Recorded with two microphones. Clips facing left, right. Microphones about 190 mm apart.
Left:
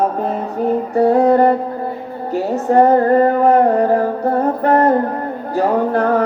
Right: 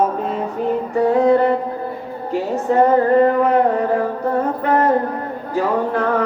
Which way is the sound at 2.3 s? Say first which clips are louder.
Left 3 dB; 40° left (ahead or behind).